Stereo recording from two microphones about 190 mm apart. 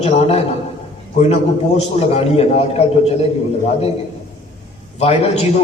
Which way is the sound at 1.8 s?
35° left (ahead or behind).